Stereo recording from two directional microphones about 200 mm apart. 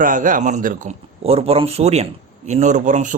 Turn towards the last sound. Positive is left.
turn(degrees=-40)  # may be behind; listen again after turning